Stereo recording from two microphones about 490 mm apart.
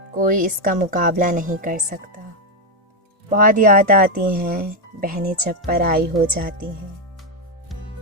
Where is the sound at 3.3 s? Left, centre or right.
Centre.